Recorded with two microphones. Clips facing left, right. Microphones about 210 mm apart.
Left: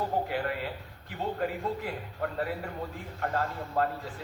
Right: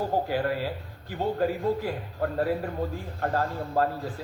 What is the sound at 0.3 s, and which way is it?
A man's voice, 35° right (ahead or behind).